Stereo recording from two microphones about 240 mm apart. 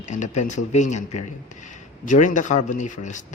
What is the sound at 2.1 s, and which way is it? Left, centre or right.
Speech, left.